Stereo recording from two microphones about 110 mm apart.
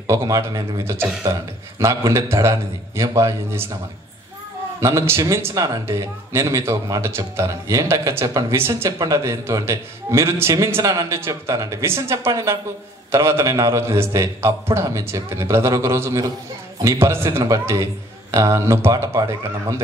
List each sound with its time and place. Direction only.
0.0 s a man's voice: 25° right (ahead or behind)
4.7 s a man's voice: 25° right (ahead or behind)